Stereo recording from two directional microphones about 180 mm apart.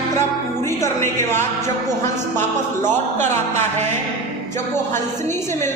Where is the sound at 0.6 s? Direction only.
15° left (ahead or behind).